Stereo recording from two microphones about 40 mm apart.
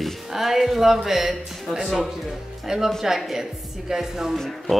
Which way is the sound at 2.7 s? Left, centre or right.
Centre.